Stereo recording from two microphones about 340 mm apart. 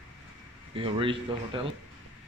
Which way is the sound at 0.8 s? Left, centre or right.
Centre.